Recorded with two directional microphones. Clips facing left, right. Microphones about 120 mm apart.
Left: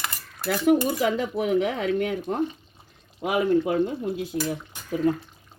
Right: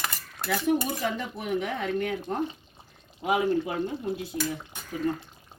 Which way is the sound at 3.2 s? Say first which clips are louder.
Left 3 dB; 90° left.